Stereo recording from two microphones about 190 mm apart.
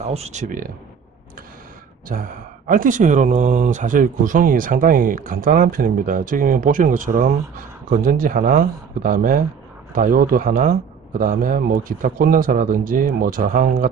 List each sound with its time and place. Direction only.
0.0 s speech: 35° right (ahead or behind)
2.0 s speech: 45° right (ahead or behind)